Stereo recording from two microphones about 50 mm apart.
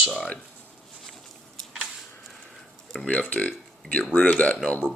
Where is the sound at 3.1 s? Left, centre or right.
Left.